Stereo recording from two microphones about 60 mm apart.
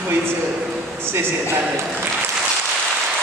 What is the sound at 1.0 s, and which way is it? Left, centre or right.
Speech, right.